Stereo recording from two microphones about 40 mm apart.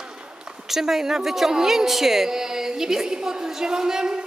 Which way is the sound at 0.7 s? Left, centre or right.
Centre.